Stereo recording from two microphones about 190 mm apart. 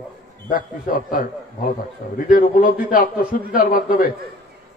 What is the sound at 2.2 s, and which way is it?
A man's voice, 45° left (ahead or behind).